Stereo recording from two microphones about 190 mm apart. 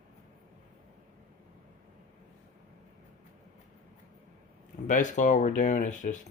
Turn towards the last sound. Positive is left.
turn(degrees=40)  # may be behind; listen again after turning